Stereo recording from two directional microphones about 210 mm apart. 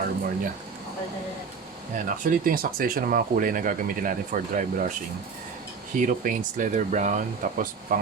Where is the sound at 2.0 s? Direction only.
40° right (ahead or behind).